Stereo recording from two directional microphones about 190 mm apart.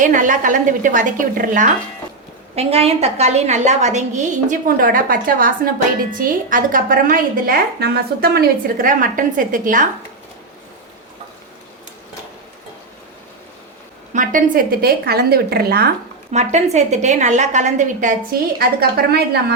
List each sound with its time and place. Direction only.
0.0 s a woman's voice: 45° right (ahead or behind)
2.6 s a woman's voice: 30° right (ahead or behind)
14.1 s a woman's voice: 45° right (ahead or behind)
16.3 s a woman's voice: 35° right (ahead or behind)
18.6 s a woman's voice: 55° right (ahead or behind)